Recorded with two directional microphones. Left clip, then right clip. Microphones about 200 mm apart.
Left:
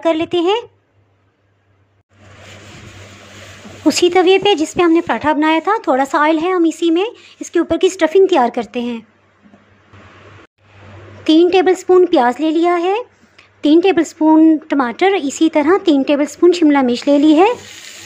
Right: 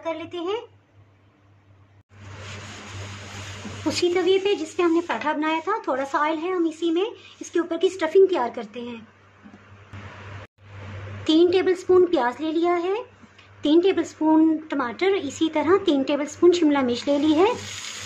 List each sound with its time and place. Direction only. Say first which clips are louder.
0.0 s speech: left 14 dB; 35° left (ahead or behind)
3.8 s speech: left 10 dB; 35° left (ahead or behind)
11.2 s a woman's voice: left 8 dB; 25° left (ahead or behind)